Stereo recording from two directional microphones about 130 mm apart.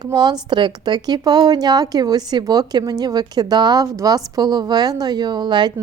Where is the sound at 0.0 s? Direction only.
30° right (ahead or behind).